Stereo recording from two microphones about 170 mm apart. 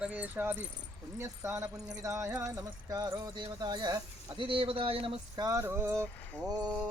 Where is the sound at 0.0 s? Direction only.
10° right (ahead or behind).